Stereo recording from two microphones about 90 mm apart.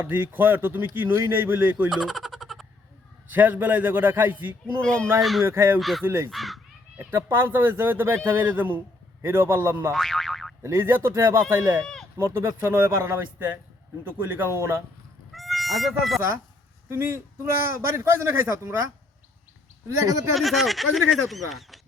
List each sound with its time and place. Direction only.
0.0 s a man's voice: 20° right (ahead or behind)
1.9 s a sound: centre (ahead or behind)
3.3 s a man's voice: 20° right (ahead or behind)
5.8 s speech: centre (ahead or behind)
6.1 s a man's voice: 30° right (ahead or behind)
6.3 s caw: centre (ahead or behind)
6.9 s a man's voice: 25° right (ahead or behind)
9.9 s boing: 5° left (ahead or behind)
10.6 s a man's voice: 30° right (ahead or behind)
15.3 s goose: centre (ahead or behind)
16.9 s a man's voice: 25° right (ahead or behind)
20.3 s speech: centre (ahead or behind)